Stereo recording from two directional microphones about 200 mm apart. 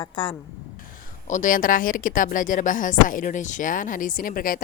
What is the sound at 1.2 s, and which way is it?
Speech, 40° left (ahead or behind).